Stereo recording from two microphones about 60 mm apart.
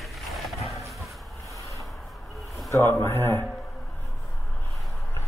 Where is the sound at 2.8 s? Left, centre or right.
Left.